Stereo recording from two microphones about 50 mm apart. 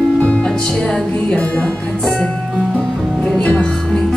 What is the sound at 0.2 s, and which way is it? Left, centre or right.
Music, left.